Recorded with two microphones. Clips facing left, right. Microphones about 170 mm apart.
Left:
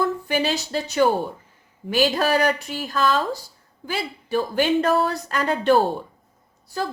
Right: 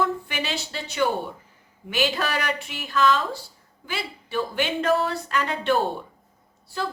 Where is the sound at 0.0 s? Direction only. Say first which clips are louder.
Left 4 dB; 40° left (ahead or behind).